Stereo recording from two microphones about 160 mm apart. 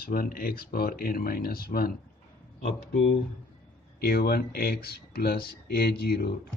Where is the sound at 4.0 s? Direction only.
75° left (ahead or behind).